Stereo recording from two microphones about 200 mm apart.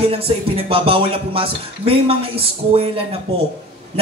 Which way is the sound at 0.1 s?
30° right (ahead or behind).